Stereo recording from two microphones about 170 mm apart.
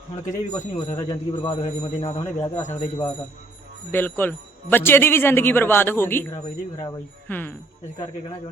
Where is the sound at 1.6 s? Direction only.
40° left (ahead or behind).